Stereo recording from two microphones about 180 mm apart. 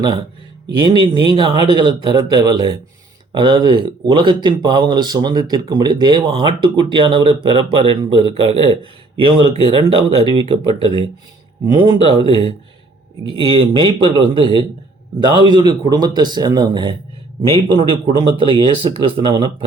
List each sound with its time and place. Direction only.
0.9 s speech: 25° right (ahead or behind)